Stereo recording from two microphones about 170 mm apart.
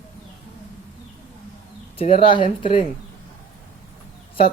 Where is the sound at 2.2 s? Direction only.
30° left (ahead or behind).